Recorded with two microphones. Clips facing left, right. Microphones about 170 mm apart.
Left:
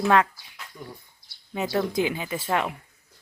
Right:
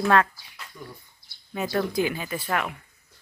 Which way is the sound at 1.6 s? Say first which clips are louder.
Even; 20° left (ahead or behind).